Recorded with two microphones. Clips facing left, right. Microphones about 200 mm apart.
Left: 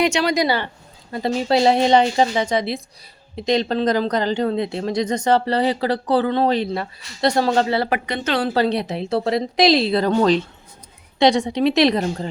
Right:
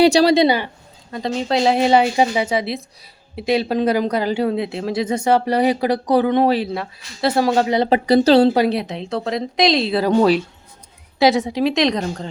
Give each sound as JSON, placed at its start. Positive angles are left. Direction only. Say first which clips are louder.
{"t": 0.0, "sound": "speech", "louder": "right 6 dB", "side_deg": -35}
{"t": 0.4, "sound": "speech", "louder": "right 4 dB", "side_deg": -15}
{"t": 1.1, "sound": "speech", "louder": "left 1 dB", "side_deg": 5}
{"t": 8.7, "sound": "speech", "louder": "left 1 dB", "side_deg": 0}